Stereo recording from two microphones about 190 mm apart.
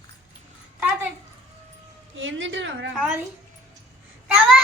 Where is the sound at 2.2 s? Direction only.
80° right.